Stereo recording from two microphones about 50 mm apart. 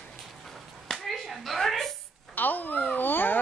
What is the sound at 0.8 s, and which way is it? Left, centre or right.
Clapping, centre.